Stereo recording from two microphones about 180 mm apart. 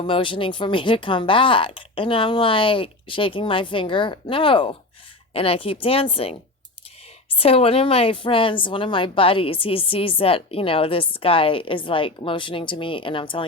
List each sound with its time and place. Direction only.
0.0 s a woman's voice: 30° left (ahead or behind)
7.3 s a woman's voice: 30° left (ahead or behind)